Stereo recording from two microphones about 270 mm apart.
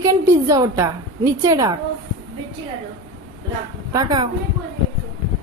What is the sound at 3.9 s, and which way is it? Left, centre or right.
Speech, centre.